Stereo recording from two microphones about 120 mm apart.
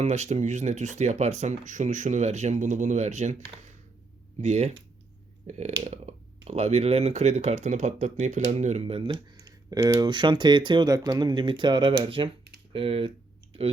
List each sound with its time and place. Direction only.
0.0 s speech: 70° right (ahead or behind)
4.4 s speech: 65° right (ahead or behind)
9.3 s speech: 35° right (ahead or behind); by 13.1 s 50° right (ahead or behind)